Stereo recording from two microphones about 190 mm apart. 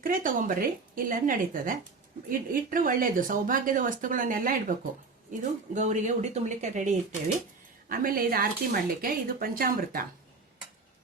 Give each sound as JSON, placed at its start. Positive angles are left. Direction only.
{"t": 0.0, "sound": "speech", "side_deg": -45}